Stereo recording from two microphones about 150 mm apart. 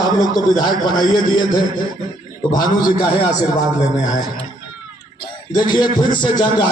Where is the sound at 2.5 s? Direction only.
30° left (ahead or behind).